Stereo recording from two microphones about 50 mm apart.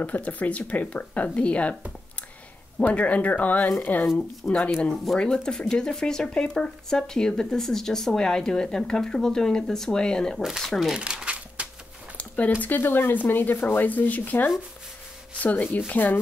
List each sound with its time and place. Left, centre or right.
0.0 s speech: left
2.8 s speech: left
4.4 s speech: left
10.6 s speech: centre
11.0 s crumpling: centre
12.2 s a sound: left
12.6 s speech: left